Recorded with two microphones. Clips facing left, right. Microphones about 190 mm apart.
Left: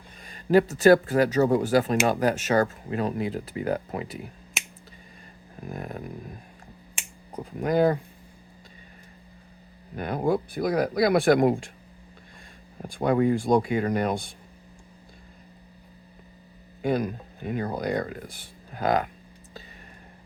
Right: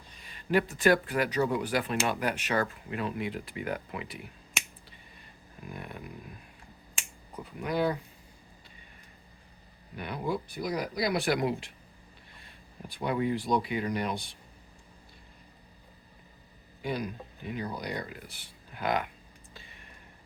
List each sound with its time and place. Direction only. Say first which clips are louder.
0.2 s speech: left 8 dB; 45° left (ahead or behind)
5.6 s speech: left 7 dB; 40° left (ahead or behind)
7.3 s speech: left 7 dB; 45° left (ahead or behind)
9.9 s speech: left 8 dB; 45° left (ahead or behind)
12.9 s speech: left 7 dB; 45° left (ahead or behind)
16.8 s speech: left 8 dB; 50° left (ahead or behind)